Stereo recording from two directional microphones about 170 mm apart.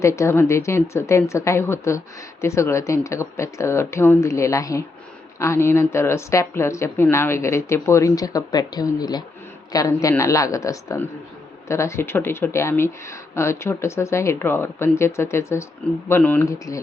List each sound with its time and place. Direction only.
0.0 s a woman's voice: 15° left (ahead or behind)